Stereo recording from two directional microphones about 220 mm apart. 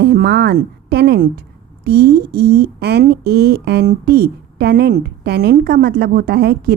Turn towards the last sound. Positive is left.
turn(degrees=-45)  # may be behind; listen again after turning